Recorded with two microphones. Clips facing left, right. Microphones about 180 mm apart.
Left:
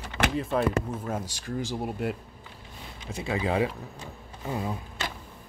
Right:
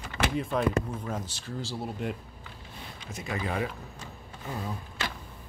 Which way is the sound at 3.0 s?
30° left (ahead or behind).